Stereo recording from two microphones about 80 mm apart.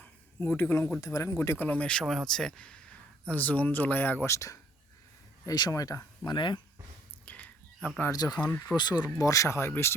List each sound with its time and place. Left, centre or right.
0.3 s speech: left
1.0 s speech: left
1.4 s speech: left
2.0 s speech: centre; by 4.3 s left
4.3 s speech: left
5.5 s speech: left
6.2 s speech: left
7.3 s whispering: centre
8.1 s speech: left
9.2 s speech: left